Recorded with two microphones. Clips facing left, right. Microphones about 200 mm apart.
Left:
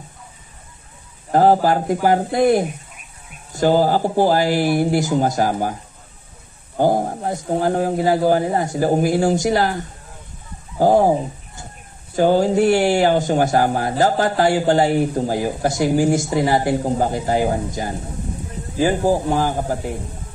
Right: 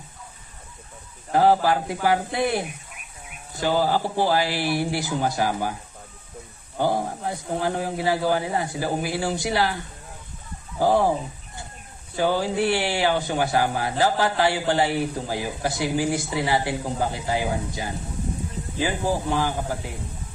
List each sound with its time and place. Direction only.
1.3 s speech: 45° left (ahead or behind)
6.8 s speech: 45° left (ahead or behind)